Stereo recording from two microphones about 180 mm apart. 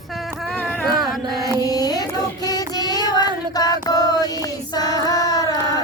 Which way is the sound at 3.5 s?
20° left (ahead or behind).